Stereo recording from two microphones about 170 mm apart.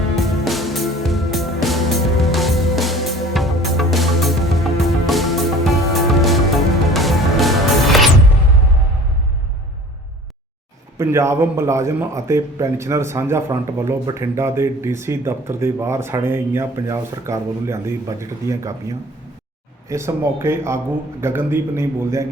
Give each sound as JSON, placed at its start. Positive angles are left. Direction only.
{"t": 0.2, "sound": "music", "side_deg": 0}
{"t": 10.9, "sound": "speech", "side_deg": -15}